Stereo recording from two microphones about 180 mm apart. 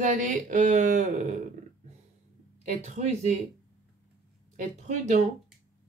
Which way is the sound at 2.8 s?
40° right (ahead or behind).